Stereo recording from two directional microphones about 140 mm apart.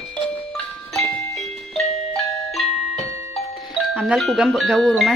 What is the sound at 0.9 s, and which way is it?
Music, centre (ahead or behind).